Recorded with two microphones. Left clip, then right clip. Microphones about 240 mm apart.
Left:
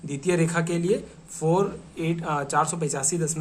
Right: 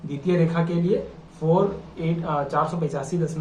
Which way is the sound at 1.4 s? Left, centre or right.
Left.